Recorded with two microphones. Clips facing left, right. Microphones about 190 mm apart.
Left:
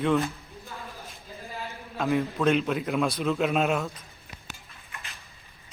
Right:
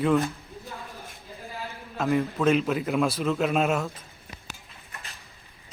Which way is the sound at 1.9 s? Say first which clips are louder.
Right 1 dB; centre (ahead or behind).